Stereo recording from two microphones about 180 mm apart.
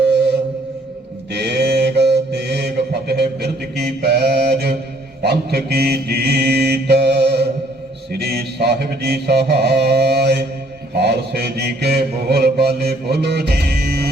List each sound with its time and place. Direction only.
1.3 s mantra: 70° right (ahead or behind)